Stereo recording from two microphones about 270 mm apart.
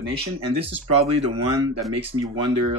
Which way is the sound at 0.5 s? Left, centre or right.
Right.